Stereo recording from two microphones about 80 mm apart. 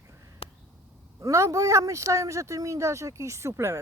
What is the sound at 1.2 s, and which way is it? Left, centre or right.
Speech, right.